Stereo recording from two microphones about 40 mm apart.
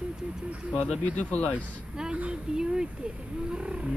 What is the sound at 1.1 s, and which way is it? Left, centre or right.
Speech, left.